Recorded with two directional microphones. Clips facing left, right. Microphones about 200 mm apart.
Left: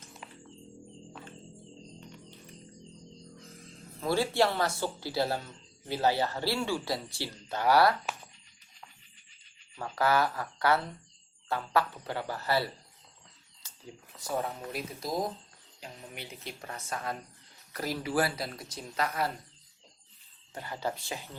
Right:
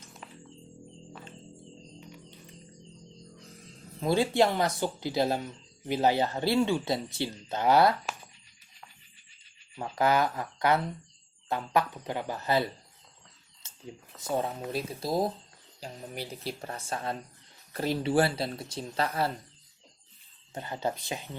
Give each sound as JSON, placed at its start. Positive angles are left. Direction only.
{"t": 4.0, "sound": "speech", "side_deg": -20}
{"t": 9.7, "sound": "speech", "side_deg": -20}
{"t": 13.6, "sound": "a sound", "side_deg": -25}
{"t": 14.2, "sound": "speech", "side_deg": -25}
{"t": 20.5, "sound": "speech", "side_deg": -20}